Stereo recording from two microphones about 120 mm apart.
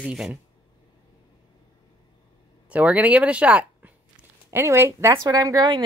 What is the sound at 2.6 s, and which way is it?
A woman's voice, 10° right (ahead or behind).